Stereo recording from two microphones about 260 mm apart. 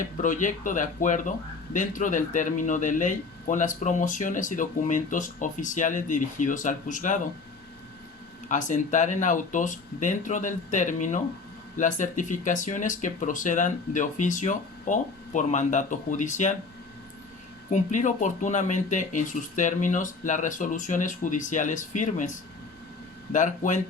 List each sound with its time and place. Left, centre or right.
0.0 s speech: left
8.4 s speech: left
17.7 s speech: left